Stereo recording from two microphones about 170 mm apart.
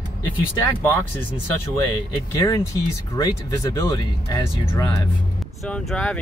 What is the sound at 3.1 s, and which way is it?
Speech, 20° left (ahead or behind).